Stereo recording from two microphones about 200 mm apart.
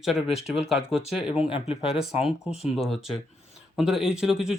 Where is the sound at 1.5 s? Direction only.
30° left (ahead or behind).